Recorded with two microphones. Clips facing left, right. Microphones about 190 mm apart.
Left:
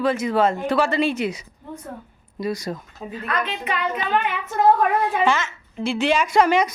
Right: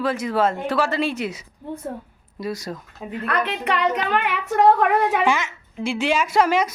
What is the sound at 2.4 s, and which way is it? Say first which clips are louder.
Speech: left 2 dB; centre (ahead or behind).